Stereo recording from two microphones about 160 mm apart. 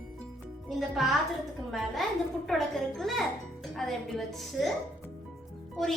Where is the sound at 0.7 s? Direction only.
Centre (ahead or behind).